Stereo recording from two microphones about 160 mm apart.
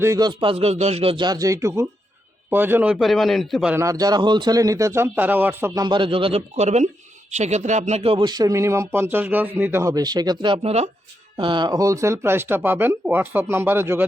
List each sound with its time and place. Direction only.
0.0 s a man's voice: 20° right (ahead or behind); by 3.8 s centre (ahead or behind)
3.8 s speech: 20° right (ahead or behind)